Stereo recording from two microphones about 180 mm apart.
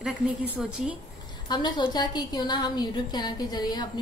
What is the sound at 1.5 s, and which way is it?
A woman's voice, 25° left (ahead or behind).